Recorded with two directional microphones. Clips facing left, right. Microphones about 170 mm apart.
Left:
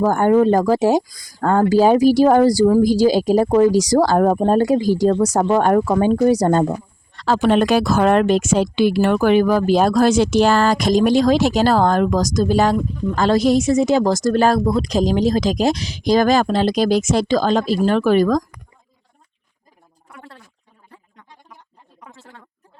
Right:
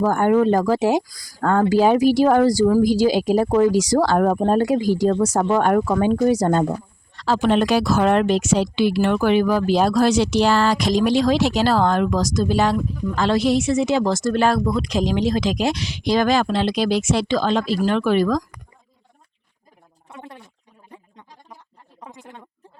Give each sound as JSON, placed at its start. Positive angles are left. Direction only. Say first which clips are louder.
{"t": 0.0, "sound": "speech", "louder": "left 2 dB", "side_deg": 40}
{"t": 1.0, "sound": "speech", "louder": "left 2 dB", "side_deg": 20}
{"t": 7.2, "sound": "speech", "louder": "left 2 dB", "side_deg": 55}
{"t": 20.1, "sound": "speech", "louder": "right 3 dB", "side_deg": -20}
{"t": 20.9, "sound": "a sound", "louder": "right 3 dB", "side_deg": -20}